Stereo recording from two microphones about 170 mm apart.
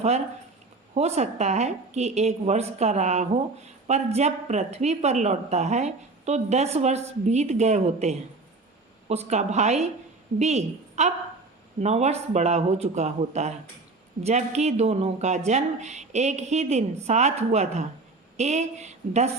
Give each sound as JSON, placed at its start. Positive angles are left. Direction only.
{"t": 0.9, "sound": "a woman's voice", "side_deg": -40}